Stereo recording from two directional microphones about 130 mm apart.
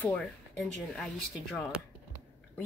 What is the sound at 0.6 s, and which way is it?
Speech, centre (ahead or behind).